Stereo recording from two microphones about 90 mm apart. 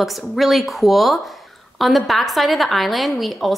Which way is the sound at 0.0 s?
Centre (ahead or behind).